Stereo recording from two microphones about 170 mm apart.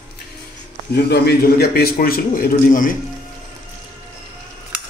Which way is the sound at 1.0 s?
70° left (ahead or behind).